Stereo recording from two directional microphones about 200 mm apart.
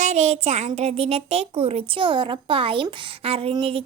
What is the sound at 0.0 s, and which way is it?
A child's voice, 35° right (ahead or behind).